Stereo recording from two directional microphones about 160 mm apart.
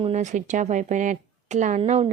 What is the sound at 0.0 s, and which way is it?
Speech, 45° right (ahead or behind).